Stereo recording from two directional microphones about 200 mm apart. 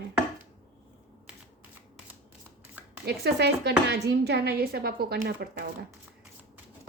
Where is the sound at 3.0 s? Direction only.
55° right (ahead or behind).